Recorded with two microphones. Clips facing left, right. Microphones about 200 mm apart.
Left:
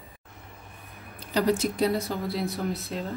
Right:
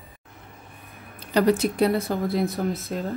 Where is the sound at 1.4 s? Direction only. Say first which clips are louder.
Right 4 dB; 60° right (ahead or behind).